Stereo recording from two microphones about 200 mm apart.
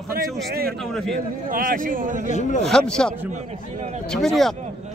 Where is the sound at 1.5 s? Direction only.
45° right (ahead or behind).